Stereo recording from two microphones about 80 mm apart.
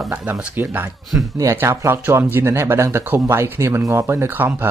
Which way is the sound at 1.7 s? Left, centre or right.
Right.